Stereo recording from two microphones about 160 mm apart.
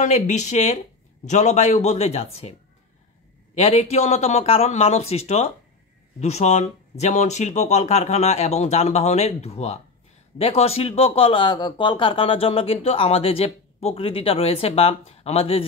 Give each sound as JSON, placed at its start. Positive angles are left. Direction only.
{"t": 0.0, "sound": "speech", "side_deg": 45}
{"t": 3.5, "sound": "speech", "side_deg": 40}